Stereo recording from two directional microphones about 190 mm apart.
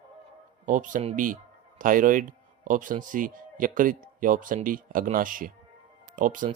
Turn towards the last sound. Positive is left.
turn(degrees=-45)  # may be behind; listen again after turning